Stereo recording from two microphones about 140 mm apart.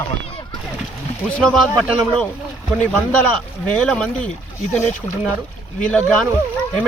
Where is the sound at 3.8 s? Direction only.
5° left (ahead or behind).